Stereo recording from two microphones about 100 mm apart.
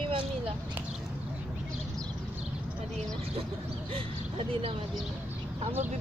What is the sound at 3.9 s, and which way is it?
Speech, 70° right (ahead or behind).